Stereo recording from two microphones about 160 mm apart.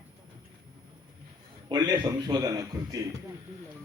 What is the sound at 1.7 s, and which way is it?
Speech, 25° right (ahead or behind).